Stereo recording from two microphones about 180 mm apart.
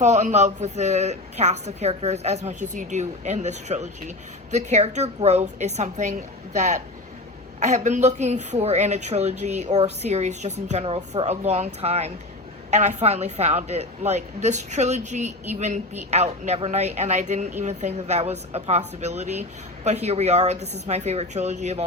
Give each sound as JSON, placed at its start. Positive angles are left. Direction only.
{"t": 0.0, "sound": "a woman's voice", "side_deg": -40}